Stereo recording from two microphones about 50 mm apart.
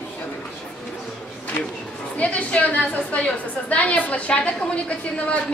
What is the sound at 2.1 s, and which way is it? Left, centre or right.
A woman's voice, left.